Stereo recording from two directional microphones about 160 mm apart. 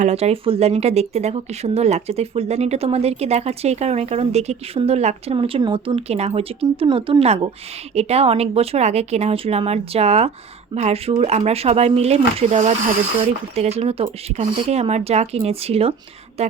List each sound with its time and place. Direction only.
0.0 s speech: 40° right (ahead or behind)